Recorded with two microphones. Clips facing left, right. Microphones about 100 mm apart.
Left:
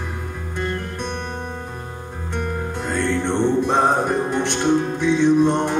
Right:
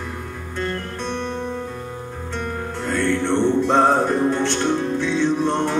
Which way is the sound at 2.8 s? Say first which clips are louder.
Right 1 dB; 20° left (ahead or behind).